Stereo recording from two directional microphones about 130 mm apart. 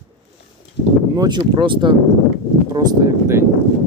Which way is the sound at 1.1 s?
30° right (ahead or behind).